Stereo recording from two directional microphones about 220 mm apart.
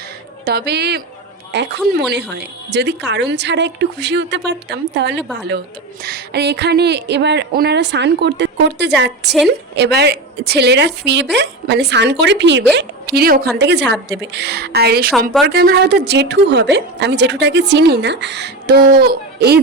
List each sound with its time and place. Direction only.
0.4 s a woman's voice: 45° right (ahead or behind)